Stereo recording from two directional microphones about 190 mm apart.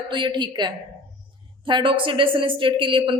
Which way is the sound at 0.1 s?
25° right (ahead or behind).